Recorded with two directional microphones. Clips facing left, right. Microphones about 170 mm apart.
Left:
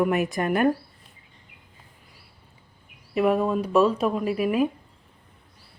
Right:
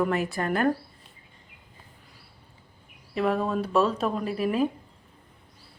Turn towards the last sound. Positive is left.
turn(degrees=10)  # may be behind; listen again after turning